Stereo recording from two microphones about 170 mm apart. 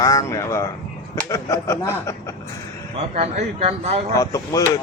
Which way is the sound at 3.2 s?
40° right (ahead or behind).